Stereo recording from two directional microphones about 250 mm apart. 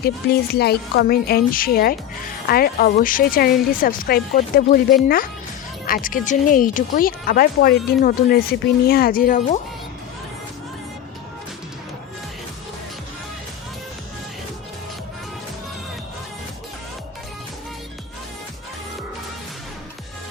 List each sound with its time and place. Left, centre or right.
0.0 s speech: left